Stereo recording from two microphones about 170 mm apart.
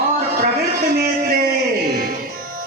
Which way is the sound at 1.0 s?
60° right (ahead or behind).